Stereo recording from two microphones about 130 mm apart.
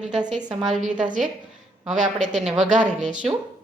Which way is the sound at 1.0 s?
80° right.